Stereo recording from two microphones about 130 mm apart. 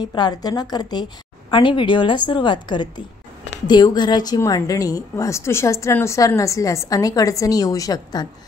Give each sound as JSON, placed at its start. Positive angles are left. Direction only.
{"t": 0.0, "sound": "a woman's voice", "side_deg": 35}